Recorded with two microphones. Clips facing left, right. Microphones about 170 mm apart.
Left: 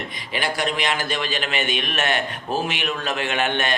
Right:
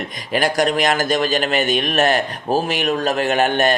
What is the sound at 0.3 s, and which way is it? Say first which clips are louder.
A man's voice: right 7 dB; 45° right (ahead or behind).